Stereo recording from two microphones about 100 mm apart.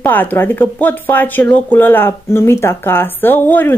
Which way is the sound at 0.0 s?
20° left (ahead or behind).